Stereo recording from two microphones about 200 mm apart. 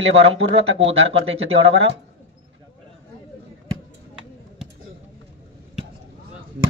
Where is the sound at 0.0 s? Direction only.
30° right (ahead or behind).